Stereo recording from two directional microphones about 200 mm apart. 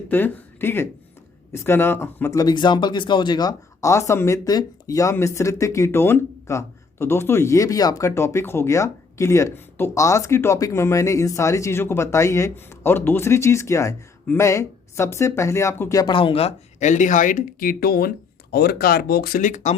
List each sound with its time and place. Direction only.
0.1 s speech: 10° left (ahead or behind); by 19.7 s 40° left (ahead or behind)